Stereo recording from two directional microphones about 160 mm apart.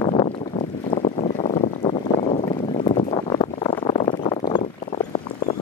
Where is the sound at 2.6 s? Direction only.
35° left (ahead or behind).